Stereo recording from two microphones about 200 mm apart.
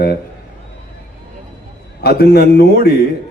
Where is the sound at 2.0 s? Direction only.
50° left (ahead or behind).